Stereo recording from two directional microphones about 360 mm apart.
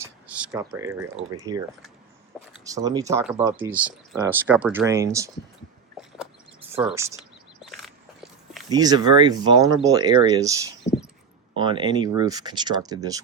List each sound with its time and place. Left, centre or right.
0.5 s speech: centre
6.7 s biting: centre
8.7 s speech: centre
10.8 s a sound: centre
11.5 s speech: centre